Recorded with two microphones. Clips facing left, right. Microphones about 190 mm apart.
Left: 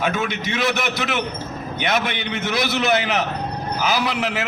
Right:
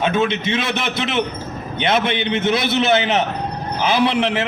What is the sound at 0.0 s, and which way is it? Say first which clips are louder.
A man's voice: right 5 dB; 25° right (ahead or behind).